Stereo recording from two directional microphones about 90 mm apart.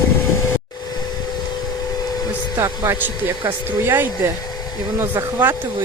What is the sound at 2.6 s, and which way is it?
Speech, 30° right (ahead or behind).